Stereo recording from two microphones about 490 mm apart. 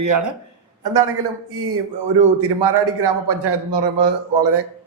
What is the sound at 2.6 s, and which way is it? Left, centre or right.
A man's voice, right.